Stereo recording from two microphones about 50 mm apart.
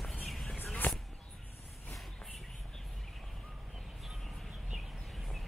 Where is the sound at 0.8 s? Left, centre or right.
Left.